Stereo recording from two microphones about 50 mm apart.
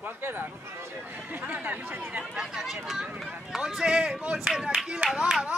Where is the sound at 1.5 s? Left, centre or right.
Right.